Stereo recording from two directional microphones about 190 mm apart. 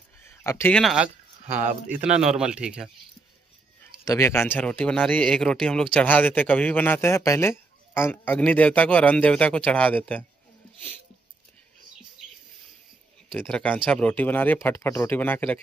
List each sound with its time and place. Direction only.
0.2 s speech: 10° left (ahead or behind)
1.6 s speech: 40° right (ahead or behind)
2.3 s speech: 5° right (ahead or behind)
4.0 s speech: 15° left (ahead or behind)
13.3 s speech: centre (ahead or behind)